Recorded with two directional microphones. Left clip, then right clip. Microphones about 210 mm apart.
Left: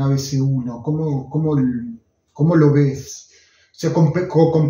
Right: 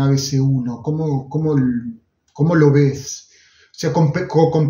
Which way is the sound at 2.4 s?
50° right (ahead or behind).